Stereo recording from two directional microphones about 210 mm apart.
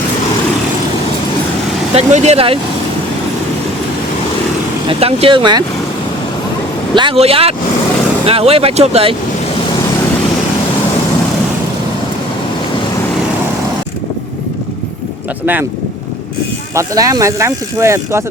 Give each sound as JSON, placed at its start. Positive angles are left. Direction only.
{"t": 2.0, "sound": "speech", "side_deg": -30}
{"t": 4.9, "sound": "speech", "side_deg": -30}
{"t": 6.9, "sound": "speech", "side_deg": -25}
{"t": 16.7, "sound": "speech", "side_deg": -15}